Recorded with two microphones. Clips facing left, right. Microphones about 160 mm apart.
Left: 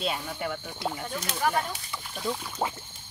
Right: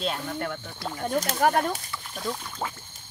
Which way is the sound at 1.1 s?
45° right (ahead or behind).